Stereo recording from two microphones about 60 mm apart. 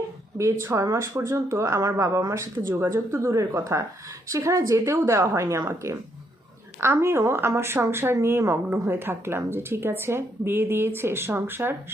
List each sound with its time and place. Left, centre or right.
0.3 s speech: right
2.6 s a woman's voice: right
8.9 s speech: right